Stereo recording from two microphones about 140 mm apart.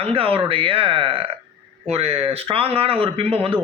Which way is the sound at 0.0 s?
40° right (ahead or behind).